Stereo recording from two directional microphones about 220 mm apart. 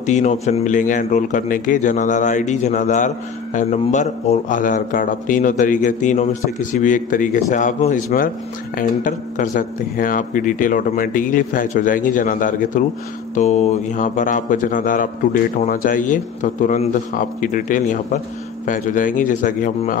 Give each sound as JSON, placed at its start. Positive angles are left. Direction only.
{"t": 0.0, "sound": "a man's voice", "side_deg": 35}